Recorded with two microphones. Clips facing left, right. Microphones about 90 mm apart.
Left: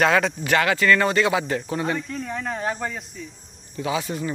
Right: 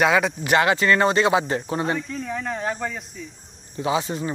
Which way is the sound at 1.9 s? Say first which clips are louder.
Right 1 dB; centre (ahead or behind).